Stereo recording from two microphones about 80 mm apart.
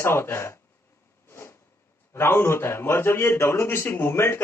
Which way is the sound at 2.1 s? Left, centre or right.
Left.